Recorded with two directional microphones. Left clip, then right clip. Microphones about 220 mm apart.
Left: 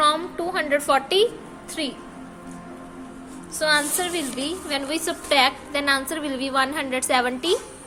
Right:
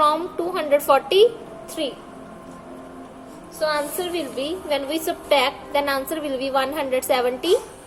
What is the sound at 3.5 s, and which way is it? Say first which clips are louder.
A woman's voice: left 2 dB; 20° left (ahead or behind).